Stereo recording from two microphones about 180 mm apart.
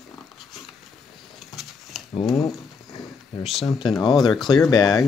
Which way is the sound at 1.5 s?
Centre (ahead or behind).